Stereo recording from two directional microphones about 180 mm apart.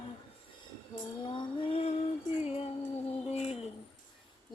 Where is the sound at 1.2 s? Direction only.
30° left (ahead or behind).